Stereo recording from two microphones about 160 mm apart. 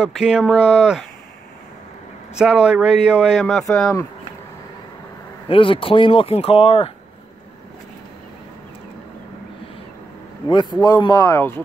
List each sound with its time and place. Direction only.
0.0 s speech: 5° right (ahead or behind)
2.3 s speech: 5° right (ahead or behind)
5.5 s speech: 30° left (ahead or behind)
10.5 s speech: 30° left (ahead or behind)